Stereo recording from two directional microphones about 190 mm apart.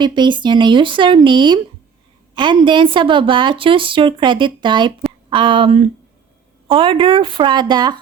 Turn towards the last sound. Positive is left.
turn(degrees=-25)  # may be behind; listen again after turning